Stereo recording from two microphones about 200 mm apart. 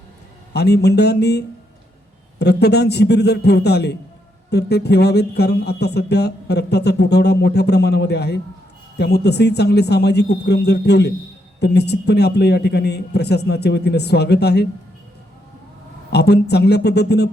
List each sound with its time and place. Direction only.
0.5 s speech: 55° left (ahead or behind)
16.0 s speech: 55° left (ahead or behind)